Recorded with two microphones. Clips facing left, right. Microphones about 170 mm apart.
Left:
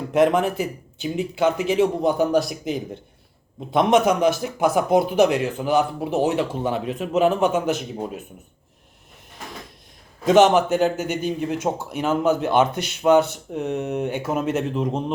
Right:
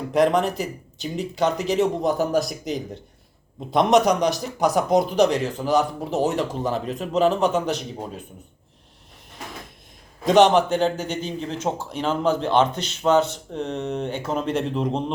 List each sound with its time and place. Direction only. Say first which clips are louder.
0.1 s speech: left 1 dB; 5° left (ahead or behind)
0.5 s speech: left 2 dB; 40° right (ahead or behind)
1.0 s speech: left 2 dB; 5° left (ahead or behind)
10.2 s speech: left 1 dB; 5° left (ahead or behind)